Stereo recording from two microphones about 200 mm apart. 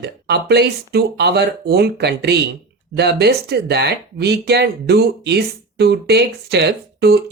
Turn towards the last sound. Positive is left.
turn(degrees=-55)  # may be behind; listen again after turning